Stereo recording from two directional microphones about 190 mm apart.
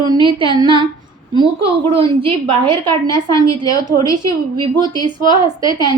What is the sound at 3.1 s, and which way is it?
A woman's voice, 15° left (ahead or behind).